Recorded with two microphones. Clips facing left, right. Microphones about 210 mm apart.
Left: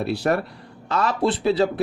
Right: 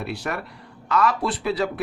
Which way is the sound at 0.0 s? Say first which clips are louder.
Left 7 dB; 35° left (ahead or behind).